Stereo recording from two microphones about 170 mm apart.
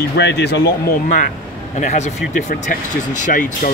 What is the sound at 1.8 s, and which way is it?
Speech, 45° left (ahead or behind).